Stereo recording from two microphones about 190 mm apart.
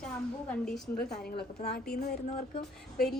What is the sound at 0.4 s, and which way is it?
A woman's voice, 5° left (ahead or behind).